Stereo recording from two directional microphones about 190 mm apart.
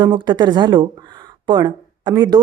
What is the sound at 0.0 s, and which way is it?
Speech, 25° right (ahead or behind).